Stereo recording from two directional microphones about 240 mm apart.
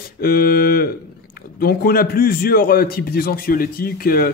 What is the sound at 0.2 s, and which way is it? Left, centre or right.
A man's voice, left.